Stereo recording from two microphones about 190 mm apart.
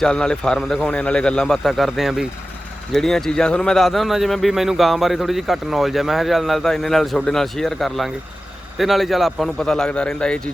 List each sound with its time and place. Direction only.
0.0 s speech: 5° left (ahead or behind)